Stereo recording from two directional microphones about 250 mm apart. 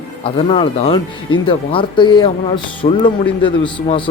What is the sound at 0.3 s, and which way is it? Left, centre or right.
Speech, left.